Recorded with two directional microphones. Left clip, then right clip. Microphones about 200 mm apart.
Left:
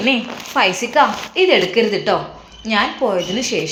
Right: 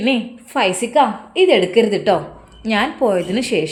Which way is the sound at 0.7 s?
35° right (ahead or behind).